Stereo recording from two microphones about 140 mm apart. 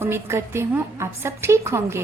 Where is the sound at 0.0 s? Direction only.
15° right (ahead or behind).